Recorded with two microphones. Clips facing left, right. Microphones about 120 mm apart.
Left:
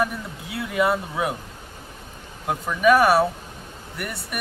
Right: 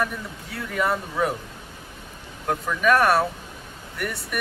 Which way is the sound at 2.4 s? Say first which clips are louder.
Left 3 dB; 5° left (ahead or behind).